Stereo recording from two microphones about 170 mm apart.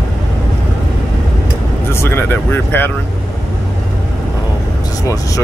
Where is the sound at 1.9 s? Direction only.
15° left (ahead or behind).